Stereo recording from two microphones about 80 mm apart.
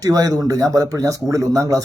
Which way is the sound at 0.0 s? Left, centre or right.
Right.